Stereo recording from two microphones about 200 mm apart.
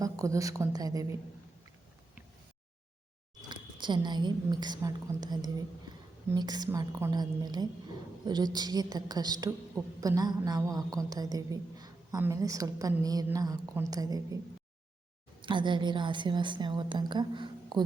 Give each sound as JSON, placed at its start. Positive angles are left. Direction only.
{"t": 0.0, "sound": "a woman's voice", "side_deg": -15}
{"t": 3.5, "sound": "a woman's voice", "side_deg": -20}
{"t": 15.4, "sound": "a woman's voice", "side_deg": -25}